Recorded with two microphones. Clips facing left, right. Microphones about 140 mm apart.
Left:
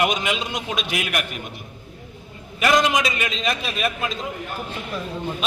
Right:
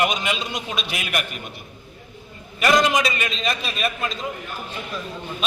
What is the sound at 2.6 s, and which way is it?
A man's voice, centre (ahead or behind).